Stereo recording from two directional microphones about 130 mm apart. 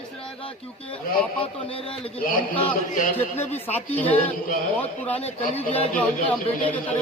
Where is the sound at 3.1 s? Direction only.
15° left (ahead or behind).